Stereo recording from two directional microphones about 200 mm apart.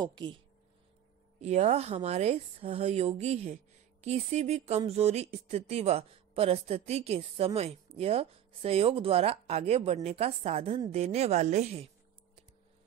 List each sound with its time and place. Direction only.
0.0 s speech: 20° right (ahead or behind)
1.4 s speech: 35° right (ahead or behind)